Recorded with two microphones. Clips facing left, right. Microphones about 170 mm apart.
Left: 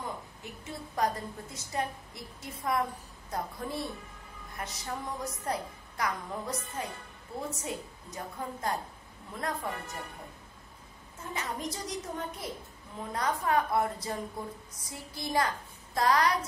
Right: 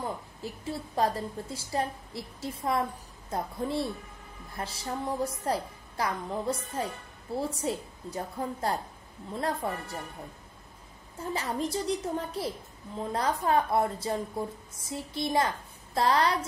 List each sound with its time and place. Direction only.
0.4 s a woman's voice: 30° right (ahead or behind)
11.3 s a woman's voice: 30° right (ahead or behind)